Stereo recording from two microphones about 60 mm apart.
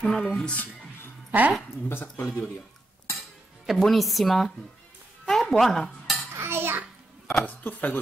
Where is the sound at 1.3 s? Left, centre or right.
Right.